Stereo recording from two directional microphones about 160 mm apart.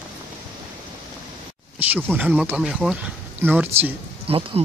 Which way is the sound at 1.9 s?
10° right (ahead or behind).